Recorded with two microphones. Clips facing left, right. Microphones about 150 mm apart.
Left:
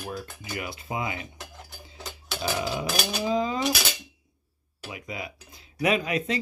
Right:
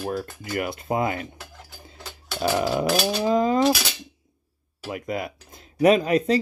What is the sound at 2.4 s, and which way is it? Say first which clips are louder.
Speech: right 7 dB; 50° right (ahead or behind).